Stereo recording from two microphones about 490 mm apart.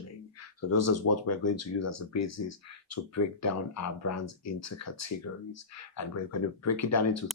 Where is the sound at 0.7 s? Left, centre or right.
Left.